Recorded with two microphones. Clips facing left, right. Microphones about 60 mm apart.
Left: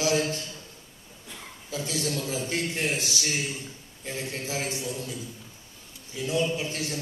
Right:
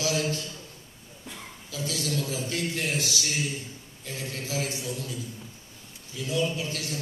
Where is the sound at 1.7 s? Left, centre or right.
Left.